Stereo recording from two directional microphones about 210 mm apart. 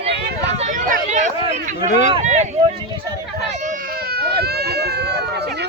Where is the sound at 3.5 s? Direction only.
35° right (ahead or behind).